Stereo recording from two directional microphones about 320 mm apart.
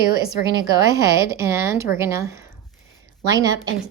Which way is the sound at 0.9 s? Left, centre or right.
Centre.